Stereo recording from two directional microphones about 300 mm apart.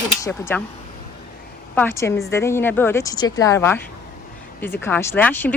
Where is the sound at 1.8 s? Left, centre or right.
Centre.